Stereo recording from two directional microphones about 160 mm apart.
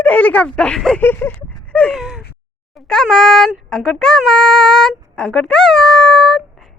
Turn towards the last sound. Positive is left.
turn(degrees=0)  # may be behind; listen again after turning